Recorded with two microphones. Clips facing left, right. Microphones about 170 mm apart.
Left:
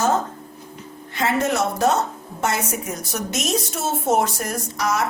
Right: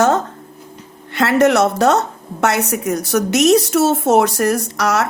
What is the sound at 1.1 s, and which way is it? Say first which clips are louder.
A woman's voice: right 8 dB; 75° right (ahead or behind).